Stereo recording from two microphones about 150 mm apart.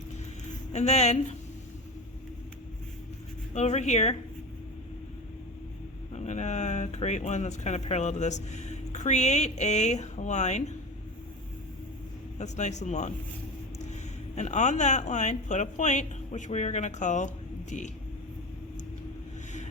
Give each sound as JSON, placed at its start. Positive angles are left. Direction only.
{"t": 0.7, "sound": "speech", "side_deg": 50}
{"t": 3.5, "sound": "speech", "side_deg": 50}
{"t": 6.1, "sound": "speech", "side_deg": 50}
{"t": 12.4, "sound": "speech", "side_deg": 50}
{"t": 14.3, "sound": "speech", "side_deg": 50}